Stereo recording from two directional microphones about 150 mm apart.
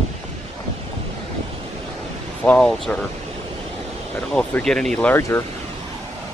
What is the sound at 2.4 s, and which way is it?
Speech, 5° left (ahead or behind).